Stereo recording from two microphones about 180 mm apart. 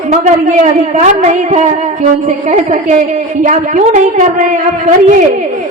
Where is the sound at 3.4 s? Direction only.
40° right (ahead or behind).